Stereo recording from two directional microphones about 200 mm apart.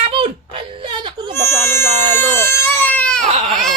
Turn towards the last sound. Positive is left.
turn(degrees=-30)  # may be behind; listen again after turning